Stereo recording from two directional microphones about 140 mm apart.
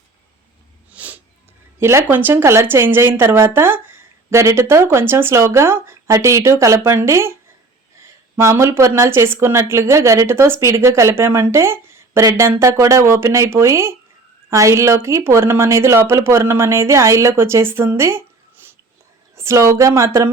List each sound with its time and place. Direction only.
0.9 s a sound: 10° right (ahead or behind)
1.8 s a woman's voice: 20° right (ahead or behind)
19.4 s a woman's voice: 20° right (ahead or behind)